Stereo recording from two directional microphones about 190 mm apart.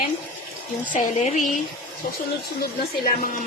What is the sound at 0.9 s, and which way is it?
Speech, 40° left (ahead or behind).